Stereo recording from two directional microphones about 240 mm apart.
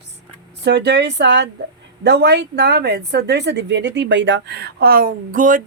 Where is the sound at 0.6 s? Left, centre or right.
Right.